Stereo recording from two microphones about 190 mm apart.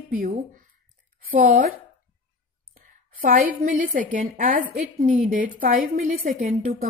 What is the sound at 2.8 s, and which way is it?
Speech, 45° right (ahead or behind).